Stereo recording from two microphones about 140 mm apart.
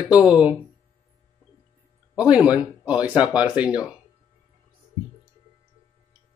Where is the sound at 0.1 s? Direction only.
10° right (ahead or behind).